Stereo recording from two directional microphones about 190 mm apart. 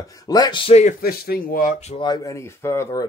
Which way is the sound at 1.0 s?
55° left (ahead or behind).